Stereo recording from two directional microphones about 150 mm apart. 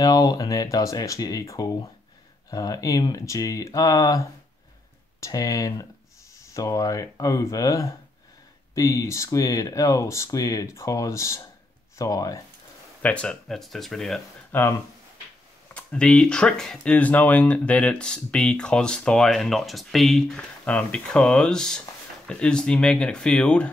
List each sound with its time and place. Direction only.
0.0 s speech: 25° left (ahead or behind)
13.0 s speech: 10° left (ahead or behind)
14.5 s speech: 15° left (ahead or behind)